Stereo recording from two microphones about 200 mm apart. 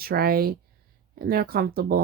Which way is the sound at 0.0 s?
50° right (ahead or behind).